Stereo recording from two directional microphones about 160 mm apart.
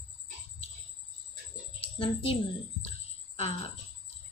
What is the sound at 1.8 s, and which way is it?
Speech, 35° left (ahead or behind).